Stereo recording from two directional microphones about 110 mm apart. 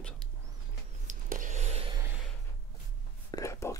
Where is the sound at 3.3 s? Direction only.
30° left (ahead or behind).